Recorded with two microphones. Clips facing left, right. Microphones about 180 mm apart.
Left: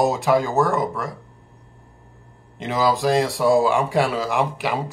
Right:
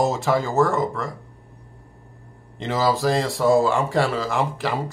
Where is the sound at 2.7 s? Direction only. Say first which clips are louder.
Left 1 dB; 15° left (ahead or behind).